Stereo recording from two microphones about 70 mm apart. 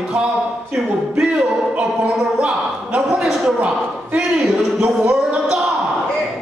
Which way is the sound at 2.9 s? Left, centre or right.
Centre.